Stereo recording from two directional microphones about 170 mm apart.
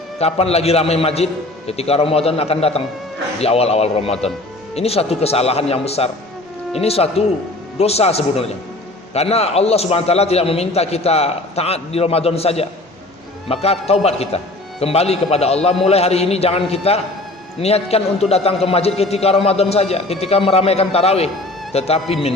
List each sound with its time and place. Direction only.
0.2 s a man's voice: 35° left (ahead or behind)